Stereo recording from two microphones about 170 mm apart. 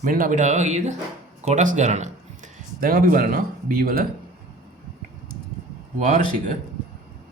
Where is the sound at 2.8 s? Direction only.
55° right (ahead or behind).